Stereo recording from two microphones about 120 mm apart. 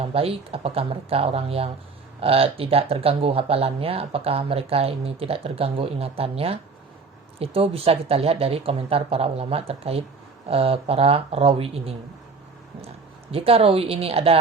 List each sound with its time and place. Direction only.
0.0 s speech: 55° right (ahead or behind)
13.3 s speech: 55° right (ahead or behind)